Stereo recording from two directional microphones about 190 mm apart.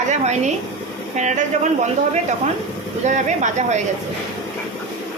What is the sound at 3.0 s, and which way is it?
Speech, 40° right (ahead or behind).